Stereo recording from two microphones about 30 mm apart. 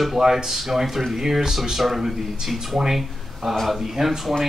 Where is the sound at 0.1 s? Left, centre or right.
Centre.